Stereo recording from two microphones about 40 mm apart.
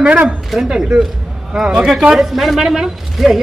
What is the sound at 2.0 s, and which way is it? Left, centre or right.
Speech, centre.